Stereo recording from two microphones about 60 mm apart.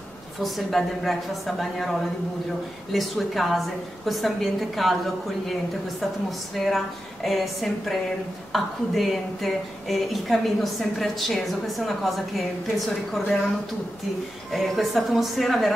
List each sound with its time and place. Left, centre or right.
0.4 s a woman's voice: centre
6.5 s a woman's voice: centre
14.5 s a woman's voice: centre